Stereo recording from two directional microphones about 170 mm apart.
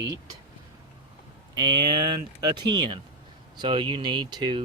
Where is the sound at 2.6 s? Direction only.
25° right (ahead or behind).